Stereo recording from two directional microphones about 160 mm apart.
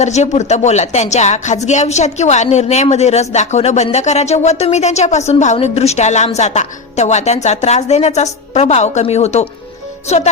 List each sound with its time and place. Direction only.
0.0 s a woman's voice: 45° left (ahead or behind)